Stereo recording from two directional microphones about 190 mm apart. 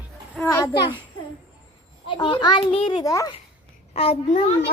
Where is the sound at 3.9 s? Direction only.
30° left (ahead or behind).